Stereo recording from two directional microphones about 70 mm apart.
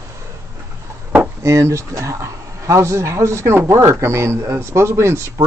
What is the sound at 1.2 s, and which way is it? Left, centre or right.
Speech, right.